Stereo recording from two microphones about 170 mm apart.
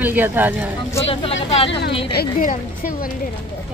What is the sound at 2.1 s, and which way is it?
A woman's voice, 60° left (ahead or behind).